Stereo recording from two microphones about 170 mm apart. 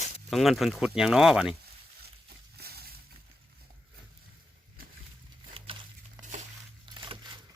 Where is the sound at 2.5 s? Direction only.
65° right (ahead or behind).